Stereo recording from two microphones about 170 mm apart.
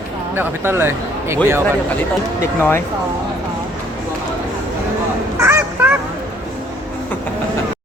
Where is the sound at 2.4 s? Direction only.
15° left (ahead or behind).